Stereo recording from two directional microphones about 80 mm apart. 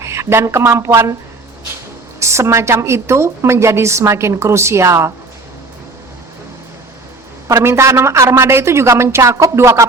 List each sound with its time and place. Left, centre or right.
0.0 s a woman's voice: right
2.1 s a woman's voice: right
7.4 s a woman's voice: right